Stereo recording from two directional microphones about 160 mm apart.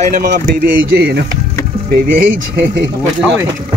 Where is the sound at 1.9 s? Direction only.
90° right.